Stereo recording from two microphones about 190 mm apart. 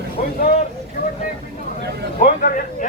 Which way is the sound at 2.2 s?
45° left (ahead or behind).